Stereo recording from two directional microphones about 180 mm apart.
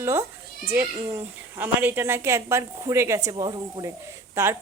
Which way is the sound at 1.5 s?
10° right (ahead or behind).